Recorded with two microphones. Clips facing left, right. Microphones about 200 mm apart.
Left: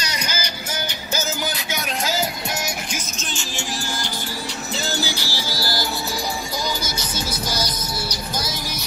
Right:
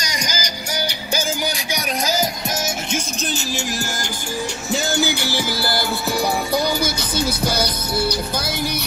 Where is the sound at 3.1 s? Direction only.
40° right (ahead or behind).